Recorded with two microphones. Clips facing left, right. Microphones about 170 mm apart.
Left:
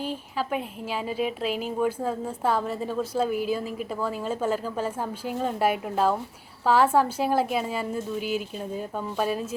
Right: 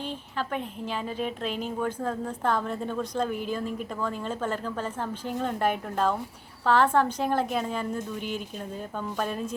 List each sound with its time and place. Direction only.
0.0 s a woman's voice: 5° left (ahead or behind)